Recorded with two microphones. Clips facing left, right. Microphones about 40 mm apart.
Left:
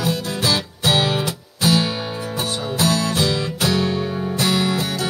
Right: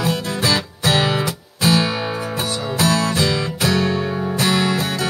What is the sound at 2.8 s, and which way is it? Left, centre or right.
Music, right.